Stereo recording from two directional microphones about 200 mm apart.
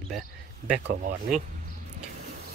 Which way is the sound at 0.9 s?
50° right (ahead or behind).